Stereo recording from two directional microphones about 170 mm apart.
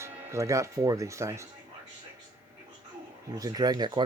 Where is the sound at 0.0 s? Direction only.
15° right (ahead or behind).